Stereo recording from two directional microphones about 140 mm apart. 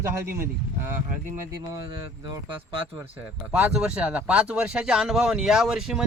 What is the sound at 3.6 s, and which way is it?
Speech, 5° right (ahead or behind).